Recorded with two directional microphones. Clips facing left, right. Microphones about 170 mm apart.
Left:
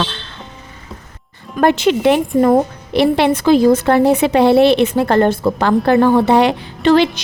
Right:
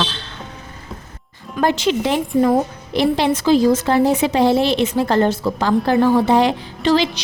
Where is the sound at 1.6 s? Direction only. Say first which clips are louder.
Left 5 dB; 55° left (ahead or behind).